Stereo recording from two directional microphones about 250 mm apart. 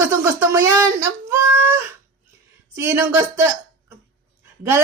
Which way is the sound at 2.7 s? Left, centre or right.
Centre.